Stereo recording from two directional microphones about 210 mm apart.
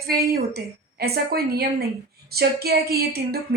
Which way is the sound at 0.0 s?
50° right (ahead or behind).